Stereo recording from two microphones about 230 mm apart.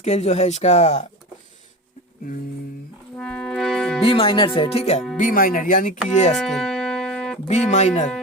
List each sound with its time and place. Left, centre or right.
0.0 s speech: left
3.2 s music: centre
4.0 s speech: left
6.3 s music: centre
7.4 s speech: left